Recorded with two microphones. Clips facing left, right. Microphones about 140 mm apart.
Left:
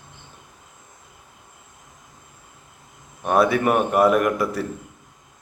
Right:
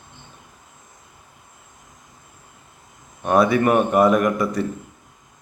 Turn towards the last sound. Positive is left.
turn(degrees=5)  # may be behind; listen again after turning